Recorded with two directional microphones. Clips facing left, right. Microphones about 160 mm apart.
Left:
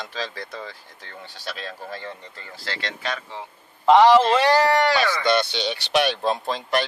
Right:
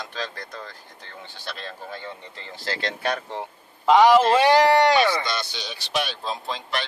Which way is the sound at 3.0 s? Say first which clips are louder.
Right 4 dB; 55° right (ahead or behind).